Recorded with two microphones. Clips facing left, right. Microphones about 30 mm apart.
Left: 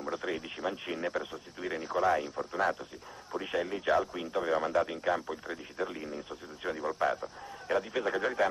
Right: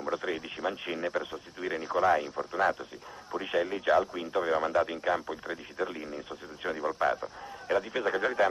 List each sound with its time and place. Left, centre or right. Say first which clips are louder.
0.0 s speech: right 3 dB; centre